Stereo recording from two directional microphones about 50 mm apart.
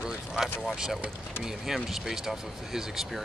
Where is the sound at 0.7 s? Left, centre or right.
Centre.